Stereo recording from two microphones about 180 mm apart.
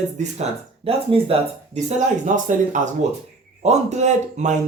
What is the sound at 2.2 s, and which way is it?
Speech, 45° right (ahead or behind).